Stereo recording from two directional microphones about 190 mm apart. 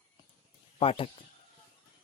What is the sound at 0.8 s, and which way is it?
Speech, 30° left (ahead or behind).